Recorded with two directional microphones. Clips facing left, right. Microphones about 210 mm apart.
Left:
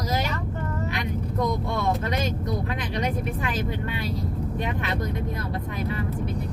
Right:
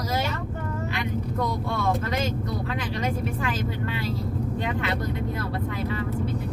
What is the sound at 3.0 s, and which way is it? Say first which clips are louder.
Speech: left 2 dB; 20° left (ahead or behind).